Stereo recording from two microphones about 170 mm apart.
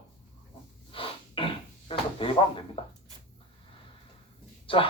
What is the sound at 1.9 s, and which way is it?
Drawer open or close, 30° left (ahead or behind).